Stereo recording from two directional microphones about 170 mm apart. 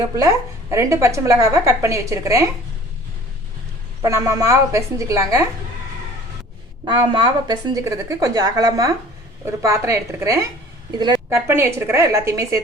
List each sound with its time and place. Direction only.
0.2 s a woman's voice: 20° right (ahead or behind)
4.0 s a woman's voice: 20° right (ahead or behind)
6.8 s a woman's voice: 25° right (ahead or behind)
11.3 s a woman's voice: 15° right (ahead or behind)